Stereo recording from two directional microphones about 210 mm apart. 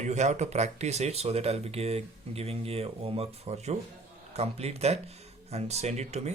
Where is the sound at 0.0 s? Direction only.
35° right (ahead or behind).